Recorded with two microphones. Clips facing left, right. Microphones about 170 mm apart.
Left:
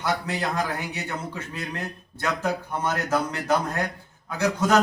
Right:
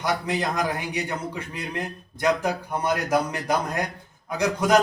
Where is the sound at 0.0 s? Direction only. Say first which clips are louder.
Right 1 dB; 15° right (ahead or behind).